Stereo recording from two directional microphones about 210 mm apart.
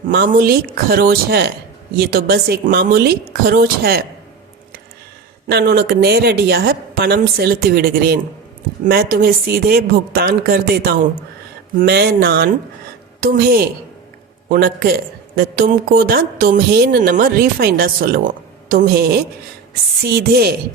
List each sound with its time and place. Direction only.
0.1 s a woman's voice: 45° right (ahead or behind)
5.5 s a woman's voice: 50° right (ahead or behind)